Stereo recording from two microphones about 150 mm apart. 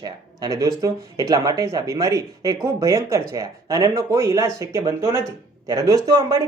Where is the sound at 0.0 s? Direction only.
25° right (ahead or behind).